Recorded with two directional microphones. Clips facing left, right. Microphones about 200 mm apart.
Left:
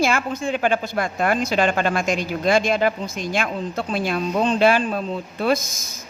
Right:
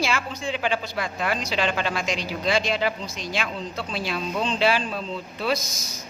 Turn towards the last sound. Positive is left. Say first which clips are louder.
# left 5 dB
turn(degrees=50)  # may be behind; listen again after turning